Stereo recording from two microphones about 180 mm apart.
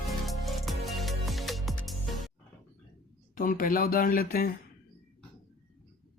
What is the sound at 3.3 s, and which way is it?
Speech, 50° left (ahead or behind).